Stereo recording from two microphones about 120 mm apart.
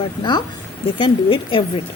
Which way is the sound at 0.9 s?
45° left (ahead or behind).